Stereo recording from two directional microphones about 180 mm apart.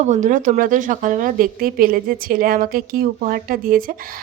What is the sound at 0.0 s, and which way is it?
Speech, 40° right (ahead or behind).